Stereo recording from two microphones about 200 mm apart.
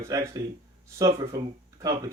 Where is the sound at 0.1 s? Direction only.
20° right (ahead or behind).